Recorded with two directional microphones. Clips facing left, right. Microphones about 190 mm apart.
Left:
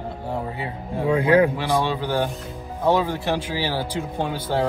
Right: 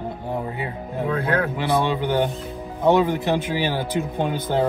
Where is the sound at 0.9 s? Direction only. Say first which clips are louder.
Left 6 dB; 10° left (ahead or behind).